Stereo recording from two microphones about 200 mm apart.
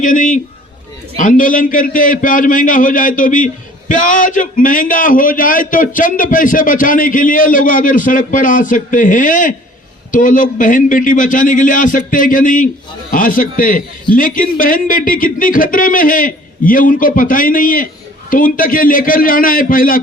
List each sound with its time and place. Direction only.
0.0 s a man's voice: 40° left (ahead or behind)